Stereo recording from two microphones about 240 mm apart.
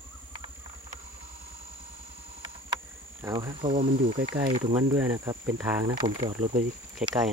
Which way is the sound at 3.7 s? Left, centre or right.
Right.